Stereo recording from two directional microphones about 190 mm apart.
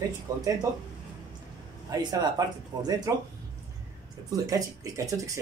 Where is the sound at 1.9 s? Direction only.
20° right (ahead or behind).